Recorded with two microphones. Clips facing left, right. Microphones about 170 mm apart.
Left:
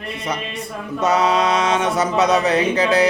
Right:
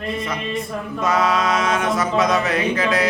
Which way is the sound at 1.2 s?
30° left (ahead or behind).